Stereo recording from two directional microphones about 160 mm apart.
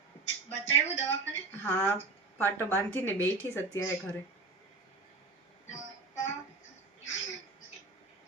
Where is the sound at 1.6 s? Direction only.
10° left (ahead or behind).